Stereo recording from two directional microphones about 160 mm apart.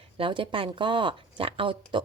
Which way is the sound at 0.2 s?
35° right (ahead or behind).